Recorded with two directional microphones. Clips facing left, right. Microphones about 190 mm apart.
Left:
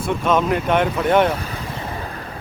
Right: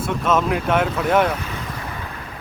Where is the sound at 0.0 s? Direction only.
Centre (ahead or behind).